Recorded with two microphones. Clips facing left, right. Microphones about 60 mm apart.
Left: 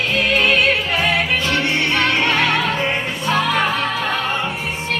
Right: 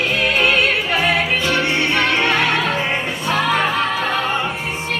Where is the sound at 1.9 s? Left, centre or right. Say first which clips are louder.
Even; centre.